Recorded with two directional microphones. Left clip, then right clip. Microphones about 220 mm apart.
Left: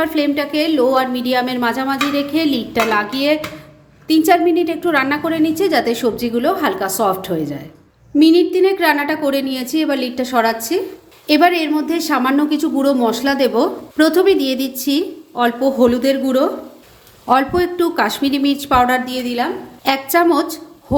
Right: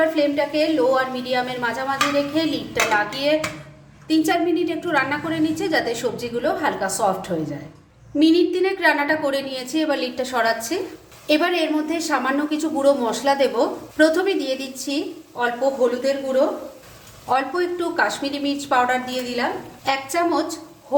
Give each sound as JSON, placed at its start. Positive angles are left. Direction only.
{"t": 0.2, "sound": "a woman's voice", "side_deg": 35}